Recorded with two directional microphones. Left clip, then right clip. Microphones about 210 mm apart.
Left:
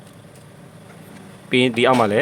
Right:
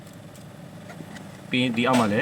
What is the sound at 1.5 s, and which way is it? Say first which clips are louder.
Speech: left 7 dB; 55° left (ahead or behind).